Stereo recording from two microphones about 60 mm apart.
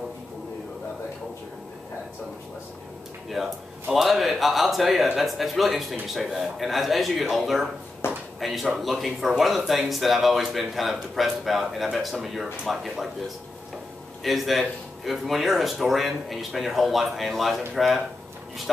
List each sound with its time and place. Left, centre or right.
3.3 s speech: centre
8.0 s a sound: left
8.4 s speech: centre
14.2 s speech: centre